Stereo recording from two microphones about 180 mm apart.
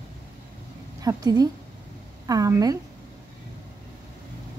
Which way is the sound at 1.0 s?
20° right (ahead or behind).